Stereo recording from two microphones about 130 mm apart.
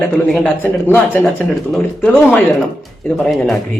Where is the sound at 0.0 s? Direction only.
Centre (ahead or behind).